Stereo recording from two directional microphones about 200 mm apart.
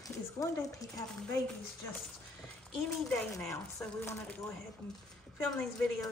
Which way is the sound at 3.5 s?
10° left (ahead or behind).